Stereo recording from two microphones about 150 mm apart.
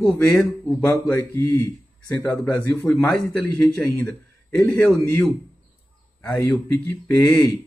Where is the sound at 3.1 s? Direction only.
5° left (ahead or behind).